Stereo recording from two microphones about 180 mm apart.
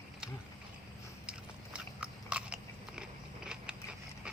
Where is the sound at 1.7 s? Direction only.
5° right (ahead or behind).